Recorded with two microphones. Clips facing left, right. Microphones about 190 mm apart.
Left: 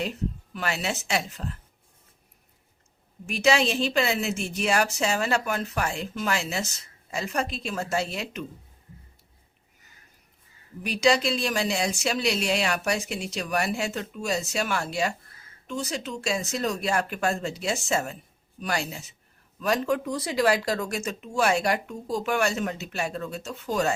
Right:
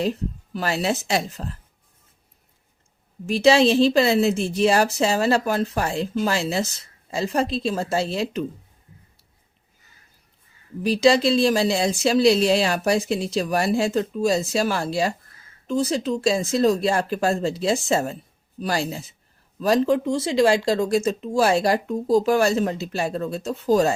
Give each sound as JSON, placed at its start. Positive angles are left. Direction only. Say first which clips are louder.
{"t": 0.5, "sound": "a woman's voice", "louder": "right 8 dB", "side_deg": -35}
{"t": 3.2, "sound": "a woman's voice", "louder": "right 7 dB", "side_deg": -30}
{"t": 10.8, "sound": "a woman's voice", "louder": "right 6 dB", "side_deg": -30}